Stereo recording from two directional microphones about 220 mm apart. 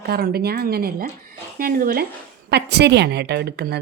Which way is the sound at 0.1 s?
45° right (ahead or behind).